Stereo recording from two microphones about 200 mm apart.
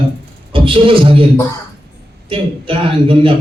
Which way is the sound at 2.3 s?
25° right (ahead or behind).